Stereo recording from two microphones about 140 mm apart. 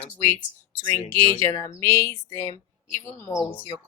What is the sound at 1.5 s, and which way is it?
A woman's voice, 25° left (ahead or behind).